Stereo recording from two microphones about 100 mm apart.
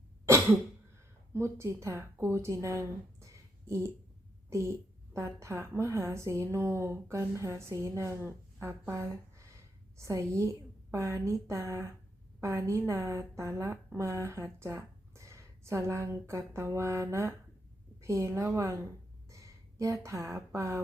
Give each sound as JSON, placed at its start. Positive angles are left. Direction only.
{"t": 1.3, "sound": "a woman's voice", "side_deg": -30}